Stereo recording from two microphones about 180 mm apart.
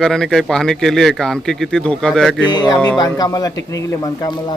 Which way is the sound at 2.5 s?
25° left (ahead or behind).